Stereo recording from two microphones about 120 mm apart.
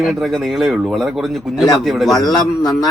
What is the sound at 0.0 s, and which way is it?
A man's voice, centre (ahead or behind).